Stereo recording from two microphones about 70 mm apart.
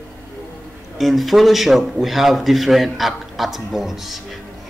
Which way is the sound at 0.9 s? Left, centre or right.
Centre.